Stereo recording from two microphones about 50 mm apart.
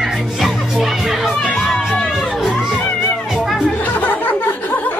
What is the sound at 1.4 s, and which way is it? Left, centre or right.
Crowd, centre.